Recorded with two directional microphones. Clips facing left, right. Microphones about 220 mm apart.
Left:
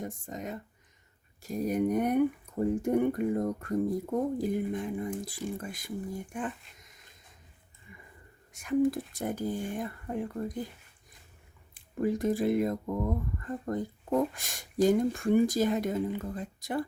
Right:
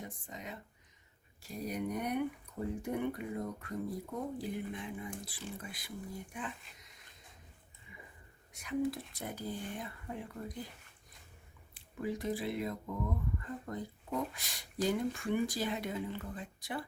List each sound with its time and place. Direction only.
0.0 s speech: 45° left (ahead or behind)
7.9 s a sound: 50° left (ahead or behind)
8.5 s speech: 50° left (ahead or behind)
11.7 s speech: 45° left (ahead or behind)